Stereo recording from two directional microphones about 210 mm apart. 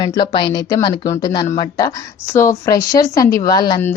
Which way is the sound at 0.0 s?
20° left (ahead or behind).